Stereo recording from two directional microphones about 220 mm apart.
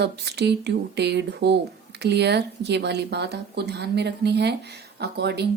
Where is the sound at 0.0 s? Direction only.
50° right (ahead or behind).